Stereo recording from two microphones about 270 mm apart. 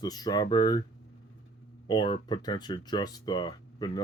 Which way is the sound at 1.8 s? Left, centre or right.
Centre.